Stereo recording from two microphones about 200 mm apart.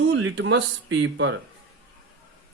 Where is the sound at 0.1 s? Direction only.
80° right.